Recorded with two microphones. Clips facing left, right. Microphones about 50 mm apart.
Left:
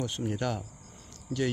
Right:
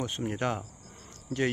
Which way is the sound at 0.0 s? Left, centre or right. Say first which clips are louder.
Right 1 dB; right.